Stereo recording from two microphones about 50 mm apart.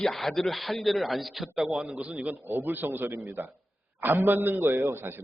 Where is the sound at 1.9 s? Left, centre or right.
Right.